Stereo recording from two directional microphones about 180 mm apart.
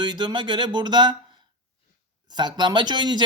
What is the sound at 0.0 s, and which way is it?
Speech, 25° right (ahead or behind).